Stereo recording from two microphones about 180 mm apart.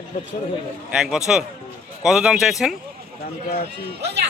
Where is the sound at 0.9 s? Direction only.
5° right (ahead or behind).